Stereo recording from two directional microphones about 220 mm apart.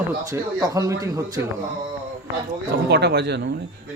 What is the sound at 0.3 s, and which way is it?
Speech, 15° right (ahead or behind).